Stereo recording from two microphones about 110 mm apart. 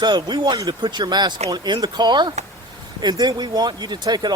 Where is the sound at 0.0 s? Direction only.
40° right (ahead or behind).